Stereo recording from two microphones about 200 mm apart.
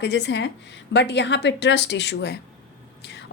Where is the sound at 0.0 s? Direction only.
60° left (ahead or behind).